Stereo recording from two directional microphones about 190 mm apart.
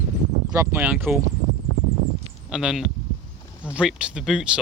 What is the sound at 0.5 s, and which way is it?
Speech, 10° right (ahead or behind).